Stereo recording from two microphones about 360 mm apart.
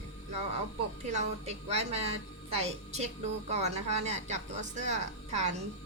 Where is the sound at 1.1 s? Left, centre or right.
Centre.